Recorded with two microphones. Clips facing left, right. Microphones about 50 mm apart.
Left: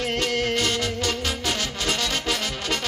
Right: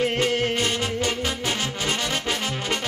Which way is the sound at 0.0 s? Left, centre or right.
Right.